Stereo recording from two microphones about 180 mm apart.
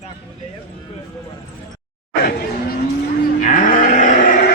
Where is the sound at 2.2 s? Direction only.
55° left (ahead or behind).